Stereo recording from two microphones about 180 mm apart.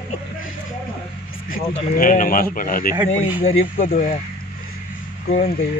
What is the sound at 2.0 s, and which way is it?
A man's voice, 50° left (ahead or behind).